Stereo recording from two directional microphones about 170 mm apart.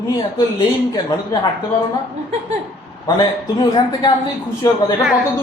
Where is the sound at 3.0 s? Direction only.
25° left (ahead or behind).